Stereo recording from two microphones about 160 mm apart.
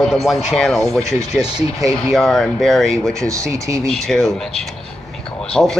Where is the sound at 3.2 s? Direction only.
20° right (ahead or behind).